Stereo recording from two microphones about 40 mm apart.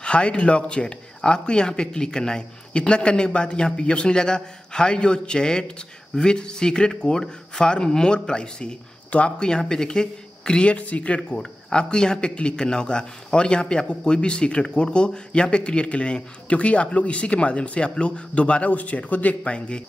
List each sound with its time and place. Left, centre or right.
0.0 s speech: left
11.1 s speech: left